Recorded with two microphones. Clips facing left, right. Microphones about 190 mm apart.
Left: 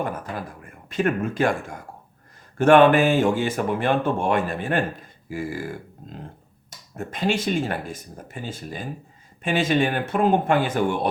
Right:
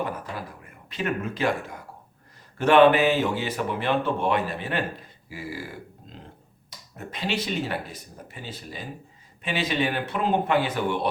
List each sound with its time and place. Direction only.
0.9 s speech: 50° left (ahead or behind)